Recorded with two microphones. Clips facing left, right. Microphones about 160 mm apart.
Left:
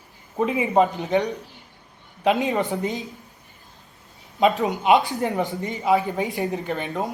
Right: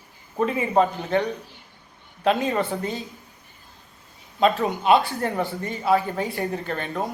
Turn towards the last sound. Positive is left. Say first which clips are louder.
# left 1 dB
turn(degrees=20)  # may be behind; listen again after turning